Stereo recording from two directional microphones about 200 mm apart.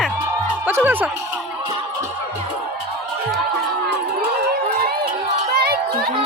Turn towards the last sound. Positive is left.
turn(degrees=-50)  # may be behind; listen again after turning